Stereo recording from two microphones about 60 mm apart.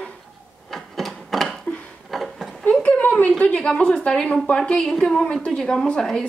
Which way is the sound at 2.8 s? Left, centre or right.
Left.